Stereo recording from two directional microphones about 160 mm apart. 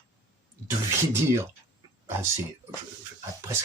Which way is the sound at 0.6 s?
15° right (ahead or behind).